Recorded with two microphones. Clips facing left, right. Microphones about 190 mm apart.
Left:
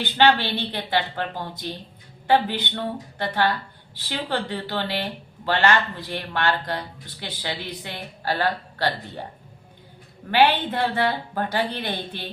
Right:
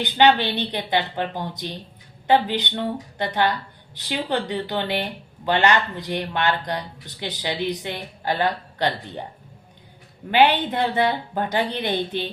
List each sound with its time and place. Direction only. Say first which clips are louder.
0.0 s a woman's voice: right 2 dB; 15° right (ahead or behind)
10.3 s speech: right 1 dB; 20° right (ahead or behind)